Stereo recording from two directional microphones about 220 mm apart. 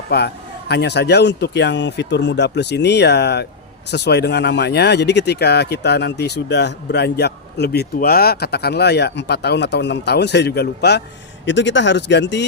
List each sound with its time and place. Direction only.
0.1 s speech: 45° left (ahead or behind)